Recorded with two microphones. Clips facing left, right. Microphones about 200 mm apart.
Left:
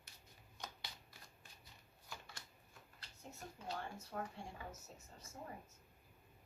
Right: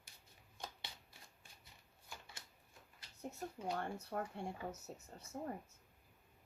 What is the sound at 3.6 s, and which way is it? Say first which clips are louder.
Speech: right 5 dB; 55° right (ahead or behind).